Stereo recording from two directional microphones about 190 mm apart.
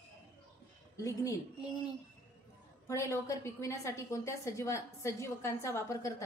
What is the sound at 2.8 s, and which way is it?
A woman's voice, 15° left (ahead or behind).